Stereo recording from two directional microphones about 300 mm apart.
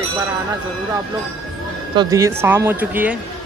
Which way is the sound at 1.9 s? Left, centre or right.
Centre.